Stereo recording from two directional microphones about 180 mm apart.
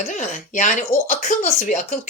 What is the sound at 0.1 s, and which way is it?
Speech, 45° left (ahead or behind).